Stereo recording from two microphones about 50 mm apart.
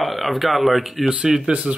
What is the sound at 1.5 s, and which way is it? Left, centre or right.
Speech, right.